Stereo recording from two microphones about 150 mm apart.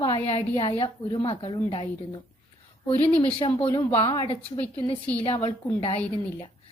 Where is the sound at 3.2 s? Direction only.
35° left (ahead or behind).